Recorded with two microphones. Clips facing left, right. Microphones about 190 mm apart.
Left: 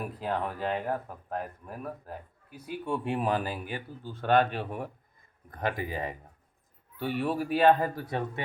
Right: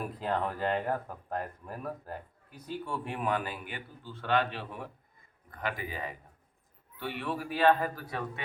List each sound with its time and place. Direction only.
0.2 s speech: 5° left (ahead or behind); by 6.0 s 45° left (ahead or behind)
7.0 s speech: 40° left (ahead or behind)
7.6 s speech: 20° left (ahead or behind)